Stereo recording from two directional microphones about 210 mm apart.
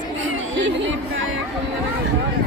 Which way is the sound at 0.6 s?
60° right (ahead or behind).